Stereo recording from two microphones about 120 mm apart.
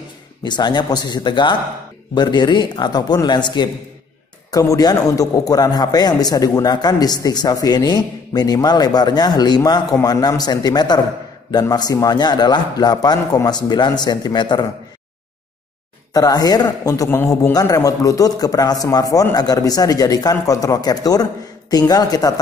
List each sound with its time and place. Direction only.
0.4 s a man's voice: 40° left (ahead or behind)
16.1 s a man's voice: 35° left (ahead or behind)